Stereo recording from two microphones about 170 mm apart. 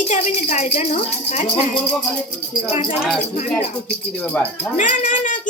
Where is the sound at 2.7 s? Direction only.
35° left (ahead or behind).